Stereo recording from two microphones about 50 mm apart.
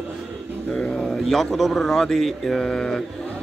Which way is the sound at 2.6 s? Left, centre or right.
Centre.